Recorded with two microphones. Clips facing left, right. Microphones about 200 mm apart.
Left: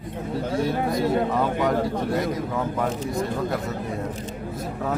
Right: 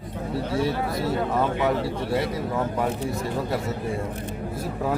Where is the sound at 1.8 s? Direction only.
45° left (ahead or behind).